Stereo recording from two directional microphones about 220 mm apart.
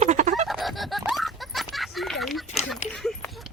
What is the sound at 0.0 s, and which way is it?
Fowl, 35° right (ahead or behind).